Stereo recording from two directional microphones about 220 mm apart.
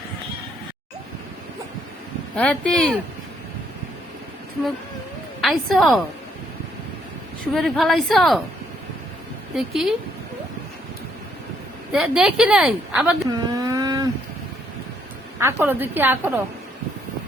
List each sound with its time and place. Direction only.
2.3 s a woman's voice: 5° left (ahead or behind)
5.4 s a woman's voice: centre (ahead or behind)
7.5 s a woman's voice: centre (ahead or behind)
9.6 s a woman's voice: centre (ahead or behind)
11.9 s a woman's voice: 5° right (ahead or behind)
13.5 s vehicle: 15° right (ahead or behind)
15.4 s a woman's voice: 10° right (ahead or behind)